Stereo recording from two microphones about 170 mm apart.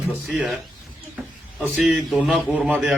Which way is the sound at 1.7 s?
Centre (ahead or behind).